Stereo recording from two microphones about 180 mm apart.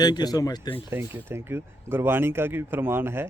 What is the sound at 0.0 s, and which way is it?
Speech, 20° left (ahead or behind).